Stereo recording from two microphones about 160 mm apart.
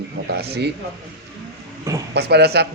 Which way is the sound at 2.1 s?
90° right.